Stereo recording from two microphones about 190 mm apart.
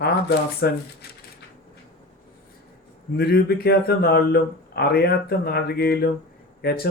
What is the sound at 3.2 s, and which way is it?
A man's voice, 55° left (ahead or behind).